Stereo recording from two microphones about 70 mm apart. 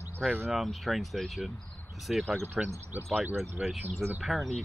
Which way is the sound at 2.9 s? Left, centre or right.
Right.